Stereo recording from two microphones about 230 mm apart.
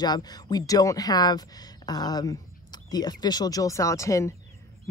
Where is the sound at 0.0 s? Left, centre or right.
Centre.